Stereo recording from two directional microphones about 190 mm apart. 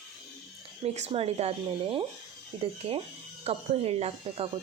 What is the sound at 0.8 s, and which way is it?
Speech, 35° right (ahead or behind).